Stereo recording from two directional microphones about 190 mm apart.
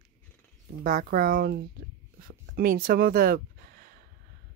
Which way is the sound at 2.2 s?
50° right (ahead or behind).